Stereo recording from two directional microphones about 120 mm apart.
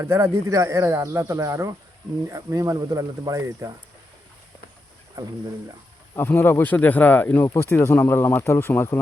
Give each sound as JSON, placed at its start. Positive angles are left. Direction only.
{"t": 0.0, "sound": "speech", "side_deg": -20}
{"t": 6.1, "sound": "speech", "side_deg": 20}